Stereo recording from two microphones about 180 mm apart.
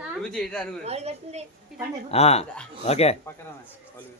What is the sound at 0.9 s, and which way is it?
Speech, 35° right (ahead or behind).